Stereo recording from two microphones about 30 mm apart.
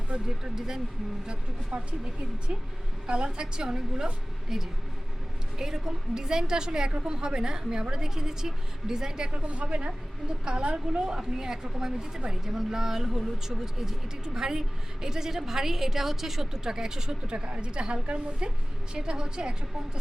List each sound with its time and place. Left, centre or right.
0.1 s speech: right
1.3 s a woman's voice: right
3.3 s a woman's voice: right
9.3 s a woman's voice: right
11.0 s a woman's voice: right
17.3 s a woman's voice: right
18.9 s a woman's voice: right